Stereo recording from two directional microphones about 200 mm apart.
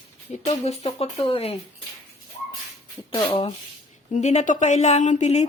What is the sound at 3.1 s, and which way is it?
Speech, 30° left (ahead or behind).